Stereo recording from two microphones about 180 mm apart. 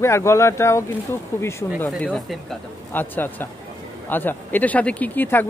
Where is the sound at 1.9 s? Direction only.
5° left (ahead or behind).